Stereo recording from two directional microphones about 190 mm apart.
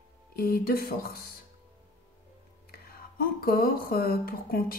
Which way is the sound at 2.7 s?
50° left (ahead or behind).